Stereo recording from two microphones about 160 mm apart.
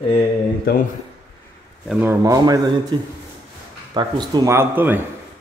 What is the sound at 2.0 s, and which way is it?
Speech, 20° right (ahead or behind).